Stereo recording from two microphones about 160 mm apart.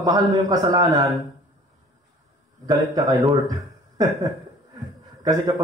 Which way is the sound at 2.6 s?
25° right (ahead or behind).